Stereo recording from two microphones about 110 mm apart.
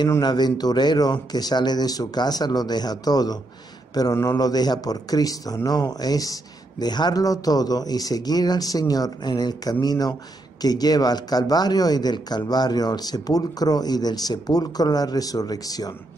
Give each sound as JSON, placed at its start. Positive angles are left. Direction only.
{"t": 0.2, "sound": "a man's voice", "side_deg": 40}